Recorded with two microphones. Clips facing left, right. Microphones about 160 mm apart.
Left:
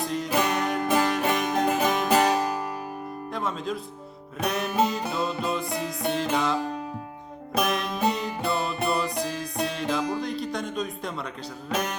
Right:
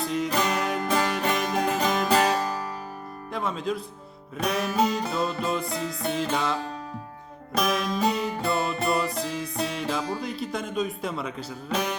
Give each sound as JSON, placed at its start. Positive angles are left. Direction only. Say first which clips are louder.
{"t": 0.0, "sound": "music", "louder": "even", "side_deg": 0}
{"t": 3.3, "sound": "music", "louder": "right 2 dB", "side_deg": 0}
{"t": 5.6, "sound": "music", "louder": "even", "side_deg": 20}
{"t": 6.0, "sound": "music", "louder": "left 2 dB", "side_deg": 0}